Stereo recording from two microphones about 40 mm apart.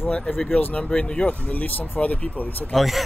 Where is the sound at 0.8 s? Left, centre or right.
Left.